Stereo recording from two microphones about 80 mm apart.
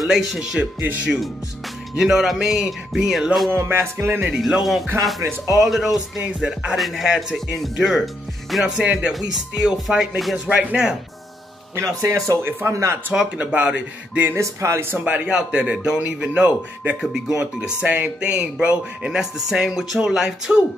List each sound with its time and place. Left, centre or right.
0.0 s speech: centre
2.0 s speech: centre
3.4 s music: right
4.4 s speech: centre
8.6 s speech: centre
10.5 s speech: centre
11.7 s music: right
13.1 s speech: centre
14.3 s music: right
14.9 s speech: centre